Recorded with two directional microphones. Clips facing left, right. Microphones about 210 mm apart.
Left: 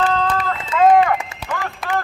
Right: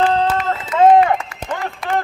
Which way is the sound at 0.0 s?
30° right (ahead or behind).